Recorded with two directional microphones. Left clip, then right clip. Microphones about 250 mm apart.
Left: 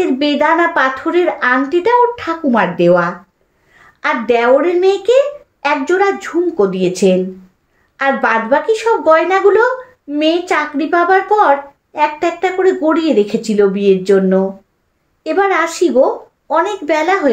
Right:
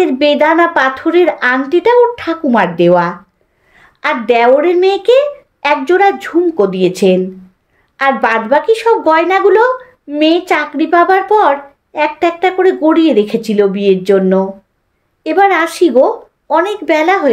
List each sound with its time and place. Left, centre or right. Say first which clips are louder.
0.0 s a woman's voice: right 4 dB; right